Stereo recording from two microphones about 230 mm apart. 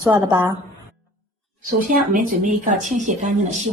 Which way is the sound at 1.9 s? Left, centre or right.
Right.